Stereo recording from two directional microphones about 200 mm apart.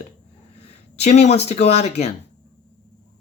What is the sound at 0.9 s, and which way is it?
Speech, 35° left (ahead or behind).